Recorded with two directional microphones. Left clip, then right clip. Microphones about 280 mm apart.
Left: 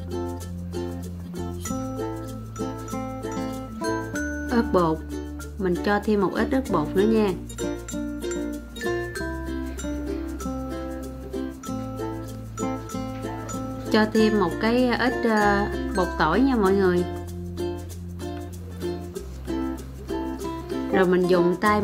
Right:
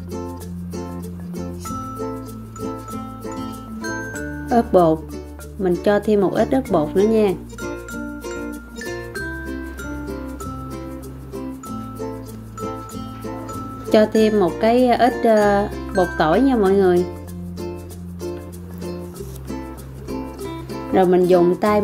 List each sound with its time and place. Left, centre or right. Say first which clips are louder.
4.5 s speech: right 8 dB; centre
13.8 s speech: right 6 dB; centre
20.9 s speech: right 6 dB; centre